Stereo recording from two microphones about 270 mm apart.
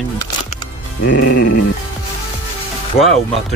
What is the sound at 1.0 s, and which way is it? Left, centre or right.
Music, left.